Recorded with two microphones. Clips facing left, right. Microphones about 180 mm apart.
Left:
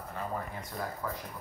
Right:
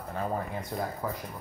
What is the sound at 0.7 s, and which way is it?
Speech, 30° right (ahead or behind).